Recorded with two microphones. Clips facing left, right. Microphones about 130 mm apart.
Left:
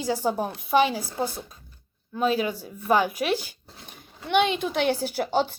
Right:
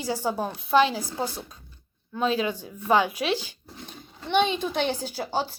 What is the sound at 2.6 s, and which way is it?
Speech, 20° right (ahead or behind).